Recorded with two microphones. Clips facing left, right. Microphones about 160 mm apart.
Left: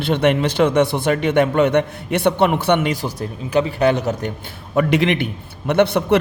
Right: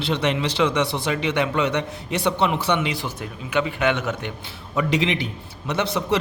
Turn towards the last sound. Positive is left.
turn(degrees=60)  # may be behind; listen again after turning